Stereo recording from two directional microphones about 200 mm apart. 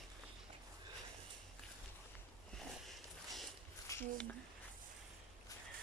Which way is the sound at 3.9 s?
10° left (ahead or behind).